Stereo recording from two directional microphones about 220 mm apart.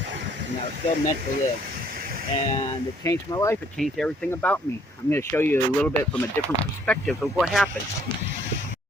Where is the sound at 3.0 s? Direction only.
15° left (ahead or behind).